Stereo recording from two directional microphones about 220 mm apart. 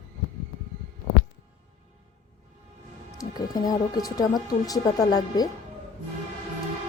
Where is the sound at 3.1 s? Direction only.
15° left (ahead or behind).